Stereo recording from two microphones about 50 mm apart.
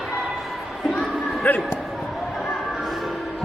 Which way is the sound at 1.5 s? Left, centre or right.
Left.